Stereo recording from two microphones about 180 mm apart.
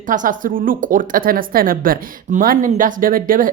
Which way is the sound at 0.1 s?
50° right (ahead or behind).